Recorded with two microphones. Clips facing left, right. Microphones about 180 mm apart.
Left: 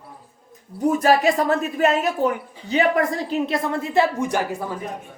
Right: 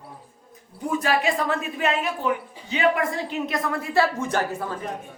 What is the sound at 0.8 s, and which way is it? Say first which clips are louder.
A woman's voice: left 6 dB; 40° left (ahead or behind).